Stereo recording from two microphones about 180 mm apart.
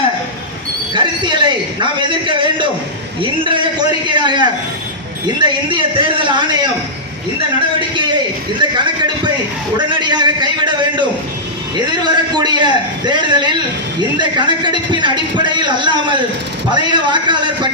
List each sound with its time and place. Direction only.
0.9 s a sound: 25° right (ahead or behind)
3.2 s a man's voice: 30° right (ahead or behind)
7.8 s a man's voice: 25° right (ahead or behind)